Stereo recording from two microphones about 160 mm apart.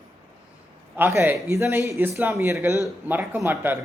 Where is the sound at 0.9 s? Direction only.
15° right (ahead or behind).